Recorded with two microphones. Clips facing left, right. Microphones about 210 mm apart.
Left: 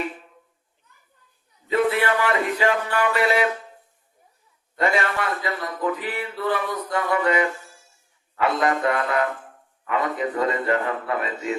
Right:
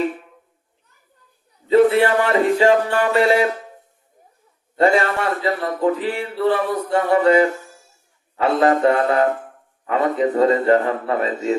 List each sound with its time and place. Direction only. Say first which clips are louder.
1.6 s a man's voice: right 7 dB; 35° right (ahead or behind)
4.8 s a man's voice: right 6 dB; 30° right (ahead or behind)